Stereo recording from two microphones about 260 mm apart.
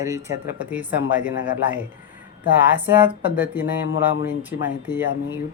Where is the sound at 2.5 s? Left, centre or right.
Centre.